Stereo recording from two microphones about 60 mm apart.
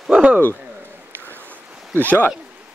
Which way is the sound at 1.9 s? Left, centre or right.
Right.